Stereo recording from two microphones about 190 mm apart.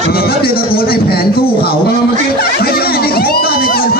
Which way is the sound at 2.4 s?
55° left (ahead or behind).